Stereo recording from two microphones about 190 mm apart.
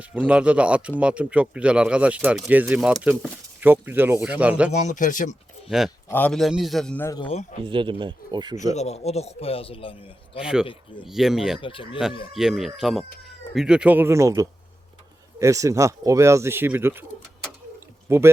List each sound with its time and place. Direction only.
0.0 s speech: 5° right (ahead or behind)
4.7 s a man's voice: 40° left (ahead or behind)
5.6 s speech: centre (ahead or behind)
6.1 s speech: 10° left (ahead or behind)
7.2 s speech: 30° left (ahead or behind)
7.6 s speech: 25° right (ahead or behind)
8.7 s a man's voice: 35° left (ahead or behind)
10.4 s speech: 5° right (ahead or behind)
11.6 s speech: 25° left (ahead or behind)
12.3 s speech: centre (ahead or behind)
17.7 s a sound: 10° right (ahead or behind)